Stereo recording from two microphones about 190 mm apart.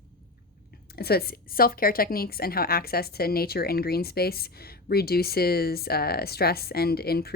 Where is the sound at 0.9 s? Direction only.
55° left (ahead or behind).